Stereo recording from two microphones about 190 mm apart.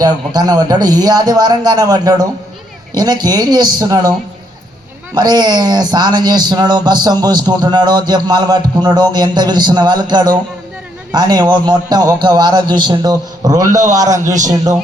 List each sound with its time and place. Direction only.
0.0 s a man's voice: 20° right (ahead or behind)
5.1 s a man's voice: 20° right (ahead or behind)